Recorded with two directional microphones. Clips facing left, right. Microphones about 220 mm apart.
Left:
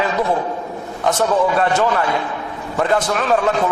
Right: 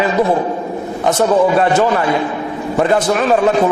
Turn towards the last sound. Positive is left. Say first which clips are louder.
# right 5 dB
turn(degrees=-15)  # may be behind; listen again after turning